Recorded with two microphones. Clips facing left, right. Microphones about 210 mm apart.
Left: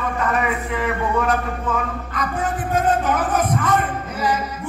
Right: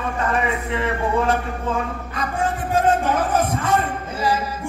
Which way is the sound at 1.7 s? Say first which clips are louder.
Right 1 dB; 25° right (ahead or behind).